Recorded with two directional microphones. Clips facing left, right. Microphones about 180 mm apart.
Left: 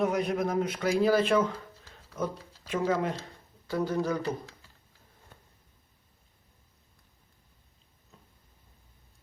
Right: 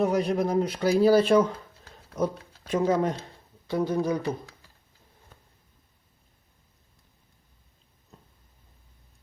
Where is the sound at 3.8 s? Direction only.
15° right (ahead or behind).